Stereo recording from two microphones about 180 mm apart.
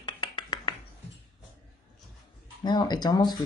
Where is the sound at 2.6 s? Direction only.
25° left (ahead or behind).